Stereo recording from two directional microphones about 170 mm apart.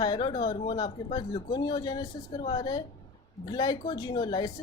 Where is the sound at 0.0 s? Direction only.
25° left (ahead or behind).